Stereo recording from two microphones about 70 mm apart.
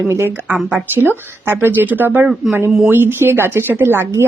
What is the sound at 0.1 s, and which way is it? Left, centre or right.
A woman's voice, right.